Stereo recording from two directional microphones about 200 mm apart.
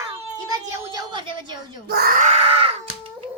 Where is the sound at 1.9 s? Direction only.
50° right (ahead or behind); by 2.7 s 30° right (ahead or behind).